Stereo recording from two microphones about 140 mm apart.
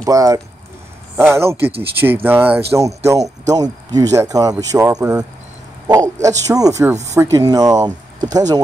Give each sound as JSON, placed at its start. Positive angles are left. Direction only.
{"t": 0.0, "sound": "speech", "side_deg": -25}
{"t": 6.2, "sound": "speech", "side_deg": -25}